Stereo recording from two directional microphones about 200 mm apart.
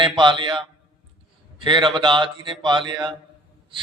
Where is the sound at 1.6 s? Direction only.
25° right (ahead or behind).